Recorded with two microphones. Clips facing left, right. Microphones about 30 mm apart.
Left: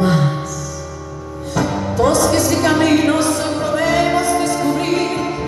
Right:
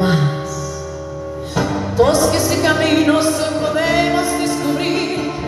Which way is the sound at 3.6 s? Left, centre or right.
Right.